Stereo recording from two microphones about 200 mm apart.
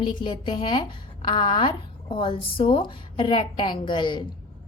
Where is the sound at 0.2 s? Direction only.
25° left (ahead or behind).